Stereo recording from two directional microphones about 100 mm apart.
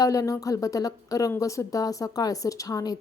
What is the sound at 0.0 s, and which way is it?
A woman's voice, 35° left (ahead or behind).